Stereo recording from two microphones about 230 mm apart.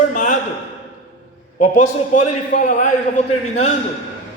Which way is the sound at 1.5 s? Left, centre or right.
Left.